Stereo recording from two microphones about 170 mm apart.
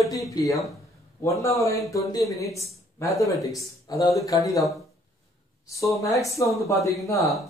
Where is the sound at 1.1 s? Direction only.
20° left (ahead or behind).